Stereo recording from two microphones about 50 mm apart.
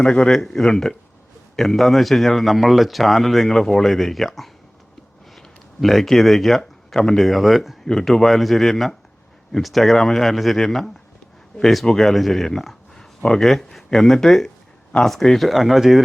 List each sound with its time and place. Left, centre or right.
0.0 s a man's voice: centre
5.8 s a man's voice: centre
7.9 s a man's voice: centre